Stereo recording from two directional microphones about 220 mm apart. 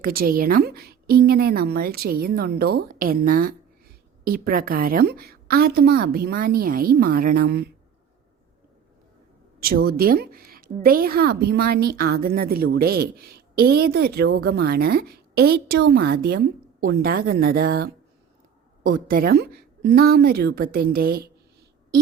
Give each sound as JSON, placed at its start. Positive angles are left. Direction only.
{"t": 0.0, "sound": "a woman's voice", "side_deg": -40}
{"t": 9.6, "sound": "a woman's voice", "side_deg": -45}